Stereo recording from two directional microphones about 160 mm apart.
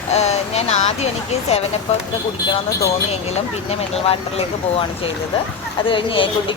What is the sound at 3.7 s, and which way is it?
Speech, 40° left (ahead or behind).